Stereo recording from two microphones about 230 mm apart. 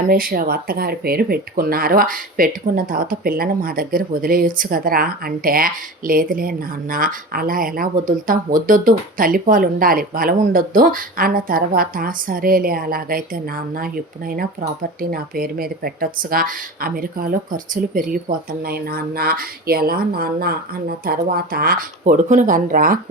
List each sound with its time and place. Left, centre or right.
0.1 s speech: right